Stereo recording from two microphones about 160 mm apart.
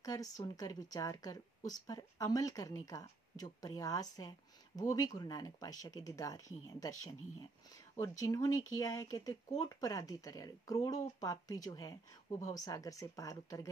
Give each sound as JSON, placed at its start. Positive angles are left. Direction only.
{"t": 0.0, "sound": "a woman's voice", "side_deg": 20}